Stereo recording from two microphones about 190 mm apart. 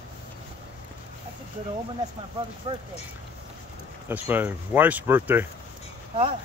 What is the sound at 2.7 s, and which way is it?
Speech, 35° right (ahead or behind).